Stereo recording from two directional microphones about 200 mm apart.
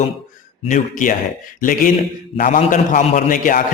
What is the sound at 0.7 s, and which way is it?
Speech, 40° left (ahead or behind).